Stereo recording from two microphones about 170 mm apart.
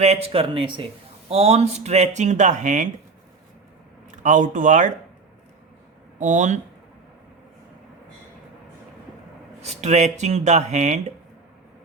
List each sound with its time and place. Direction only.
0.0 s speech: 40° right (ahead or behind)
4.1 s speech: 45° right (ahead or behind)
6.1 s speech: 45° right (ahead or behind)
9.6 s speech: 40° right (ahead or behind)